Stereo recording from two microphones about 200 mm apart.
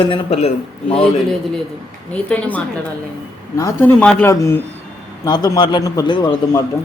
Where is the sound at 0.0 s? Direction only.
30° left (ahead or behind).